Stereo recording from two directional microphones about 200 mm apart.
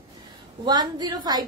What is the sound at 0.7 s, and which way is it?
Speech, 20° right (ahead or behind).